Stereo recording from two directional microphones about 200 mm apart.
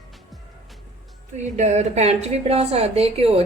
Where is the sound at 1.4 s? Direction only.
35° right (ahead or behind).